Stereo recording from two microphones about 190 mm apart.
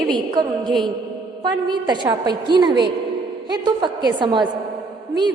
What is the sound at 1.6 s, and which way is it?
A woman's voice, 20° right (ahead or behind).